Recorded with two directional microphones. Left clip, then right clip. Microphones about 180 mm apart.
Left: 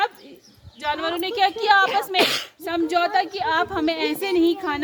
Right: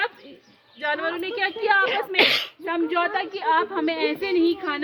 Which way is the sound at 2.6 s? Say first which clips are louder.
Left 3 dB; 80° left.